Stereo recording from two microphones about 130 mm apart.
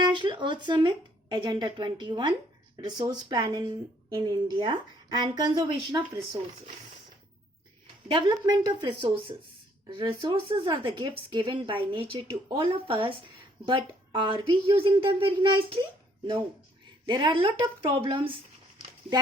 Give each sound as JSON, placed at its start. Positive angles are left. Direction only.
{"t": 0.0, "sound": "speech", "side_deg": -35}
{"t": 8.3, "sound": "speech", "side_deg": -30}
{"t": 17.1, "sound": "speech", "side_deg": -35}